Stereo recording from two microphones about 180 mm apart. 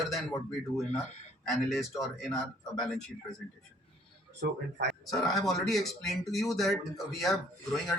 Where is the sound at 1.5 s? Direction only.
Centre (ahead or behind).